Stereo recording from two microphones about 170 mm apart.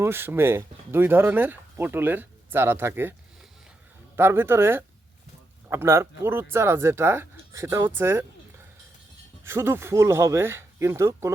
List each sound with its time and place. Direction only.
0.0 s speech: 15° right (ahead or behind)
4.2 s speech: 15° right (ahead or behind)